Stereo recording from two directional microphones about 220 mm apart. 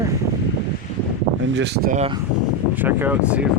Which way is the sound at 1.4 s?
55° right (ahead or behind).